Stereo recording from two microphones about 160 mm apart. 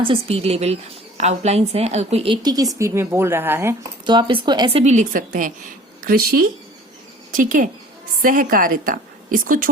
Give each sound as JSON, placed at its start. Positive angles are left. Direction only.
{"t": 0.0, "sound": "a woman's voice", "side_deg": -35}
{"t": 4.0, "sound": "a woman's voice", "side_deg": -30}
{"t": 4.8, "sound": "a woman's voice", "side_deg": -45}
{"t": 7.3, "sound": "a woman's voice", "side_deg": -55}